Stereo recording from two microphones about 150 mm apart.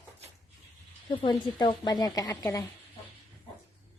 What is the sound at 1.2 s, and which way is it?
A woman's voice, 30° left (ahead or behind).